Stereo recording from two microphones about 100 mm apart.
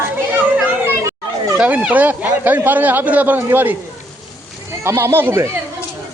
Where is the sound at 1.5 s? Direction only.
10° right (ahead or behind).